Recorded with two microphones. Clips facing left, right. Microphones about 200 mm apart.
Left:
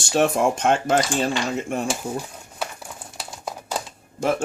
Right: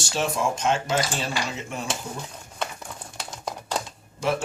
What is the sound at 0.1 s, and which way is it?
Speech, 55° left (ahead or behind).